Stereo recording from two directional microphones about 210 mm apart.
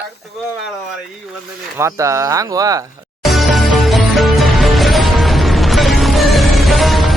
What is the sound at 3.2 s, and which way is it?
Music, centre (ahead or behind).